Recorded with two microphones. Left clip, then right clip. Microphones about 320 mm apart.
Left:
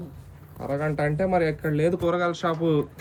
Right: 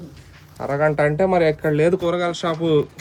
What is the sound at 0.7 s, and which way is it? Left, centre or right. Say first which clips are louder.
Speech: right 8 dB; centre.